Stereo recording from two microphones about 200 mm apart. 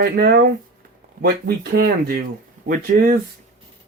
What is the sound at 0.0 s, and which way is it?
Speech, 50° right (ahead or behind).